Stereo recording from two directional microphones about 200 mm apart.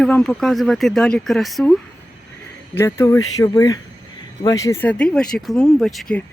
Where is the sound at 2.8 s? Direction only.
15° left (ahead or behind).